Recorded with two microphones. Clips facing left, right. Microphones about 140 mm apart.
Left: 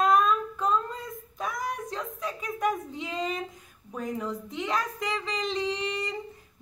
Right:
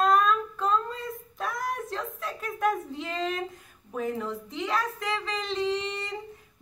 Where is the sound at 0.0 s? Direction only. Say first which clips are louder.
Even; centre (ahead or behind).